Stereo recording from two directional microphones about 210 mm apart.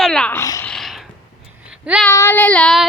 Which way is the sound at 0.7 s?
Centre (ahead or behind).